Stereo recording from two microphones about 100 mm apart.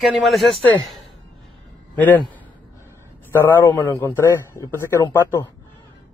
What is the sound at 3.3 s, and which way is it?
A man's voice, 25° left (ahead or behind).